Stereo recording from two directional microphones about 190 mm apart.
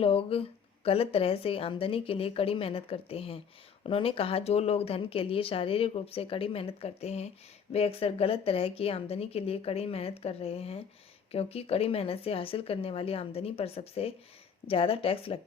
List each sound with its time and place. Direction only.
0.0 s a woman's voice: 30° left (ahead or behind)